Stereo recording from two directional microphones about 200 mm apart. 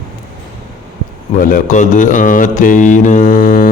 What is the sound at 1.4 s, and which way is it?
Speech, 45° left (ahead or behind).